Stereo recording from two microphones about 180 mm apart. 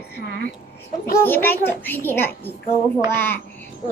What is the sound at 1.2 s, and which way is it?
Speech, 10° left (ahead or behind).